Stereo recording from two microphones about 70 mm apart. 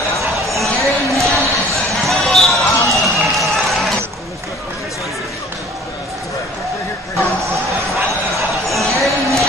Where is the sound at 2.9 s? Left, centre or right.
Centre.